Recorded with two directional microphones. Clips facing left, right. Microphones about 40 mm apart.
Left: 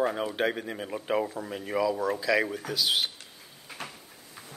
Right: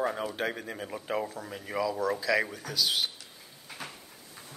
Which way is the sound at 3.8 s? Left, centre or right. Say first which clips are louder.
Left 2 dB; left.